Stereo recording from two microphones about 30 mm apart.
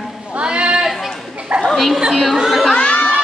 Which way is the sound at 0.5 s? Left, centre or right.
Right.